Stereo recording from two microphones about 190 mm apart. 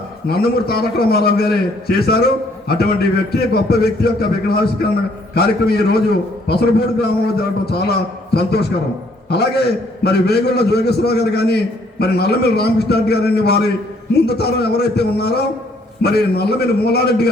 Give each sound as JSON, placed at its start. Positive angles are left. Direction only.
{"t": 0.3, "sound": "a man's voice", "side_deg": 55}